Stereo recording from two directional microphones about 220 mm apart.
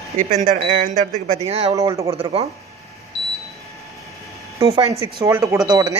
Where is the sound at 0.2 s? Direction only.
35° right (ahead or behind).